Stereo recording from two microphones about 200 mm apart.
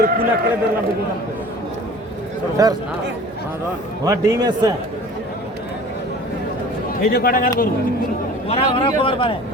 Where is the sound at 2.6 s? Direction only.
20° right (ahead or behind).